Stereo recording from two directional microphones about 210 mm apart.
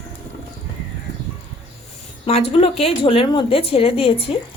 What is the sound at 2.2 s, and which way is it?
Speech, 30° left (ahead or behind).